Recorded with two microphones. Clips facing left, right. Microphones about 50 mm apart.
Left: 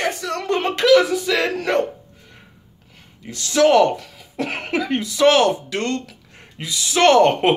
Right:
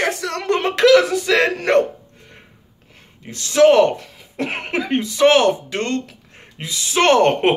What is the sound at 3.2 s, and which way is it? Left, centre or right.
Speech, right.